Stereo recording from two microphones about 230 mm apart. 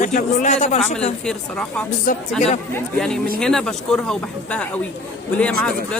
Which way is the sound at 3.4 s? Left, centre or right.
Centre.